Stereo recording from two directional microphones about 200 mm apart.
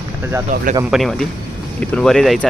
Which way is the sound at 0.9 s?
Centre (ahead or behind).